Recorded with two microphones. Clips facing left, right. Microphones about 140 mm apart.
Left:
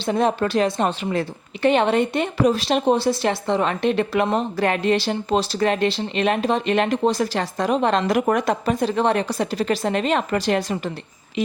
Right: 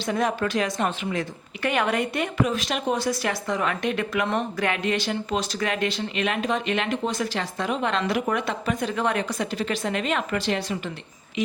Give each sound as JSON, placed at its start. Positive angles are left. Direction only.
{"t": 0.0, "sound": "a woman's voice", "side_deg": 30}